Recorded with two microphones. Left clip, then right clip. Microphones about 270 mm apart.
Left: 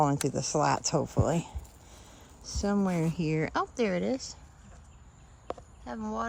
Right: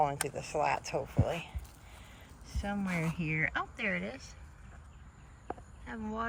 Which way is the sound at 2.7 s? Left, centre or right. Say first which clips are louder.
Left 6 dB; left.